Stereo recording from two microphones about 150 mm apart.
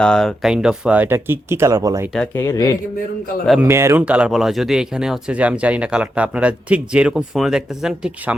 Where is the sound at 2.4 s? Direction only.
20° left (ahead or behind).